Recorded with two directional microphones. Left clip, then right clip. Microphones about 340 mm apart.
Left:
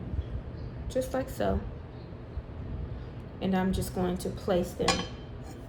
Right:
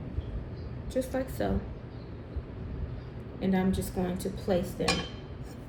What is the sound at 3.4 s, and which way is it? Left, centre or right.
A woman's voice, centre.